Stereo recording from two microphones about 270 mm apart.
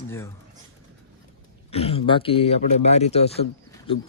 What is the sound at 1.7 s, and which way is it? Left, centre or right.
Speech, left.